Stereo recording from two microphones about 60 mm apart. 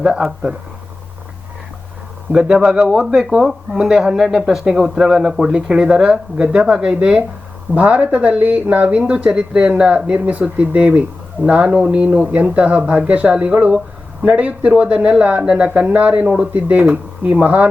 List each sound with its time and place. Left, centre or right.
2.3 s speech: centre